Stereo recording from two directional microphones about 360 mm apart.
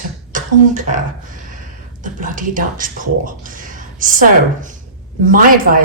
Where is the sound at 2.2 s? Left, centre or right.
Right.